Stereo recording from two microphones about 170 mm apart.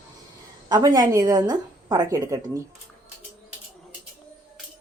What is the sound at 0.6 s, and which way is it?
A woman's voice, 25° right (ahead or behind).